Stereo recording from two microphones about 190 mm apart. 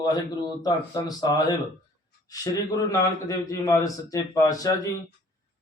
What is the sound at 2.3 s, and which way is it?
Speech, 20° left (ahead or behind).